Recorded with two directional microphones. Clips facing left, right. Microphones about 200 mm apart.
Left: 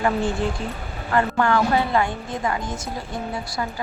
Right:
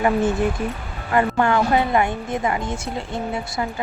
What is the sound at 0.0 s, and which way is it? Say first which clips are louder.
A woman's voice: right 3 dB; 20° right (ahead or behind).